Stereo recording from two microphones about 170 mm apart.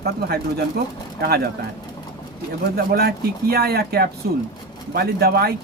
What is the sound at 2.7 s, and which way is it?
Speech, 65° right (ahead or behind).